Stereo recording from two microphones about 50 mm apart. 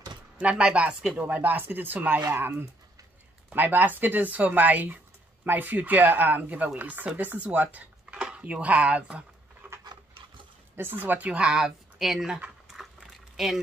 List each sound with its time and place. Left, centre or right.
0.4 s speech: right
1.3 s speech: right
2.0 s speech: right
3.5 s speech: right
9.6 s a sound: right
10.8 s speech: right
11.3 s speech: centre
13.4 s speech: centre